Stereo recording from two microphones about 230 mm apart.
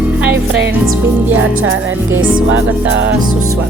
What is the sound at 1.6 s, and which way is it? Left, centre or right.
Music, right.